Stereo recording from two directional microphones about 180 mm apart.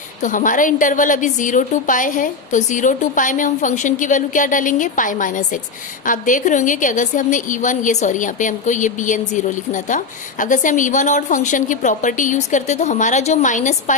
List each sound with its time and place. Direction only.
0.2 s a woman's voice: 45° left (ahead or behind)